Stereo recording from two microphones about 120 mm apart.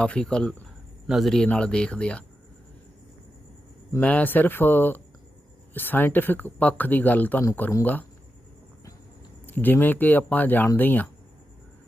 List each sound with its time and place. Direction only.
0.0 s a man's voice: 10° left (ahead or behind)
4.0 s speech: 15° left (ahead or behind)
9.5 s speech: 15° left (ahead or behind)